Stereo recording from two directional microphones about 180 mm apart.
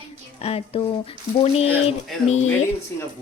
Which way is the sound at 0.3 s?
35° left (ahead or behind).